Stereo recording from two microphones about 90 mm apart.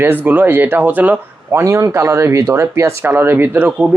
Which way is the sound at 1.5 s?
30° right (ahead or behind).